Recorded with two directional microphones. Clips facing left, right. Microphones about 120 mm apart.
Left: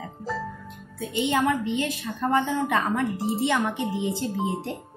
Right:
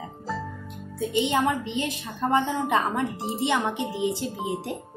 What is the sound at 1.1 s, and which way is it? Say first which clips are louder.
A woman's voice: even; 20° right (ahead or behind).